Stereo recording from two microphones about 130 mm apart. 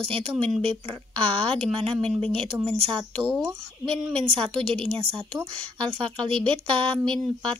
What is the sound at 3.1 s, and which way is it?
Speech, 5° left (ahead or behind).